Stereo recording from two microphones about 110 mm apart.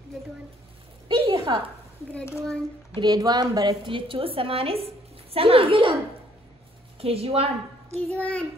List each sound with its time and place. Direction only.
1.0 s a sound: 50° right (ahead or behind)
3.0 s speech: 35° right (ahead or behind)
3.8 s a woman's voice: 50° right (ahead or behind)
7.0 s a woman's voice: 60° right (ahead or behind)
8.1 s a child's voice: 10° left (ahead or behind)